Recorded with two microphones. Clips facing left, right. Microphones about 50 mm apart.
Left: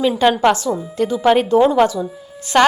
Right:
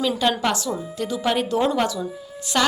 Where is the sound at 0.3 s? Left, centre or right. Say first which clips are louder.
Left 7 dB; left.